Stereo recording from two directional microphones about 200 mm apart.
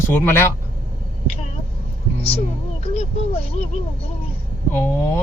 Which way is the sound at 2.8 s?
30° left (ahead or behind).